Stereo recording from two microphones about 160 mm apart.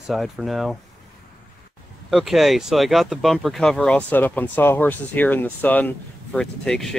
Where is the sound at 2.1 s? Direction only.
Centre (ahead or behind).